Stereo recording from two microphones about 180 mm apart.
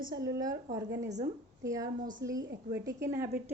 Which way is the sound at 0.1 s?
20° right (ahead or behind).